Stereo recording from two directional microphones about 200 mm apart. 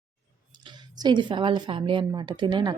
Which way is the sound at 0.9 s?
20° right (ahead or behind).